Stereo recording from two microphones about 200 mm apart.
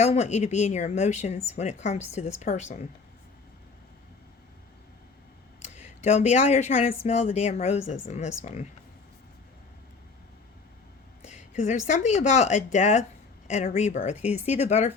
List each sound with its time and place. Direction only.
0.0 s speech: 35° left (ahead or behind)
5.6 s speech: 35° left (ahead or behind)
11.2 s a woman's voice: 35° left (ahead or behind)